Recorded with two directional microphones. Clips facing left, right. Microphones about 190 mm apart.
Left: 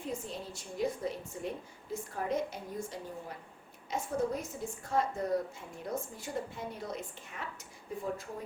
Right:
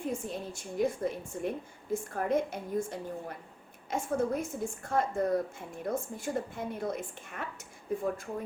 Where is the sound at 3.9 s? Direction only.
50° right (ahead or behind).